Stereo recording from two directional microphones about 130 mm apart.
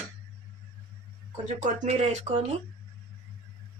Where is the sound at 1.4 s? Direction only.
70° right (ahead or behind).